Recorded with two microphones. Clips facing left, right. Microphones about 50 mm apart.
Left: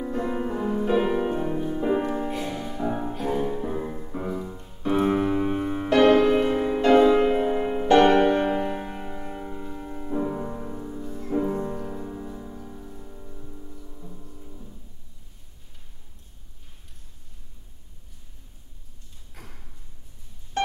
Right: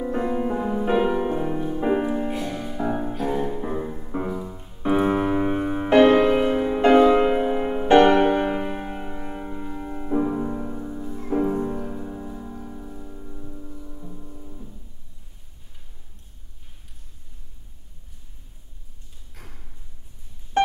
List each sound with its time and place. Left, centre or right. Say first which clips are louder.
0.3 s music: right 2 dB; centre
4.8 s music: right 2 dB; centre
20.5 s a sound: right 6 dB; right